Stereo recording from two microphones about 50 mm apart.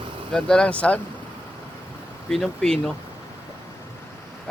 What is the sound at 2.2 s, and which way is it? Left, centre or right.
Speech, centre.